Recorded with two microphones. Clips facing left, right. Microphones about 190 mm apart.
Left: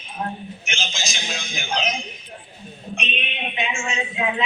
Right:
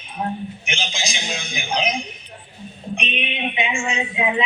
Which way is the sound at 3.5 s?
15° right (ahead or behind).